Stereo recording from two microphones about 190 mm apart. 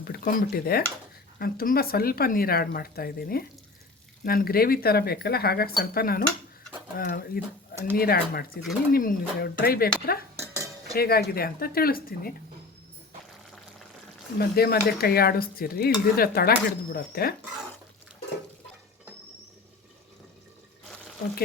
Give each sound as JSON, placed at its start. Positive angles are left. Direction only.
{"t": 0.0, "sound": "dishes", "side_deg": 50}
{"t": 10.3, "sound": "cutlery", "side_deg": -10}
{"t": 10.9, "sound": "dishes", "side_deg": 55}
{"t": 14.3, "sound": "dishes", "side_deg": 55}